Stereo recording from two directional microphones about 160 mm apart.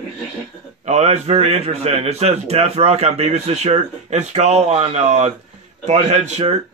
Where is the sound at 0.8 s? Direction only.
45° right (ahead or behind).